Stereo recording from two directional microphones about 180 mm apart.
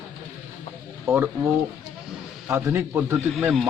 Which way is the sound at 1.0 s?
10° right (ahead or behind).